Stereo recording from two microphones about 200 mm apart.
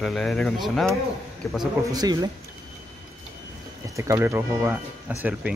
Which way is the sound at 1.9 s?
20° right (ahead or behind).